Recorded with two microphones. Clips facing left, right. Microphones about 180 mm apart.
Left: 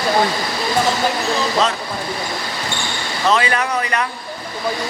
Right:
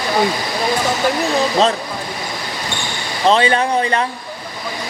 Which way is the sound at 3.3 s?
30° right (ahead or behind).